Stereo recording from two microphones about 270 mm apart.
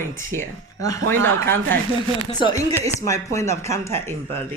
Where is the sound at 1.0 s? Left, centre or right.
Right.